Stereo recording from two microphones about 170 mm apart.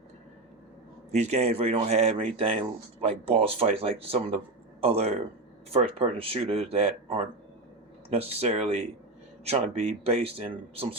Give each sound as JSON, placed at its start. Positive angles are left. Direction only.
{"t": 1.1, "sound": "speech", "side_deg": -40}